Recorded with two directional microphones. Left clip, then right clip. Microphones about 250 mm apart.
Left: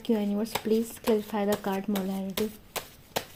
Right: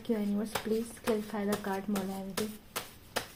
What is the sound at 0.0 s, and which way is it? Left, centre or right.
Speech, left.